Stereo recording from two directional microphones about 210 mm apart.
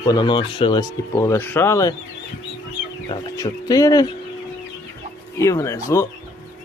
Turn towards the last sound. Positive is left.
turn(degrees=15)  # may be behind; listen again after turning